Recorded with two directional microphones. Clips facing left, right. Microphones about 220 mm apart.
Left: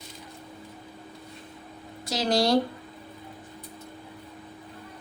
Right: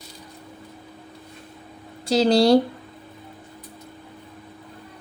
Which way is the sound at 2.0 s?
30° right (ahead or behind).